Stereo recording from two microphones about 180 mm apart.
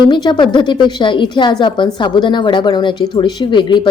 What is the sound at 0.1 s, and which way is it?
A woman's voice, 25° left (ahead or behind).